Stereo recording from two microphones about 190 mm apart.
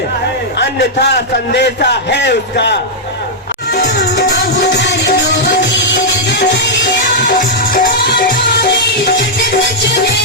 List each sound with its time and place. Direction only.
0.6 s a man's voice: 60° left (ahead or behind)
3.7 s music: 60° left (ahead or behind)
7.3 s music: 45° left (ahead or behind)